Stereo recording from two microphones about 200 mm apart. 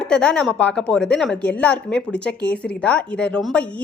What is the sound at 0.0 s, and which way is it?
A woman's voice, 5° left (ahead or behind).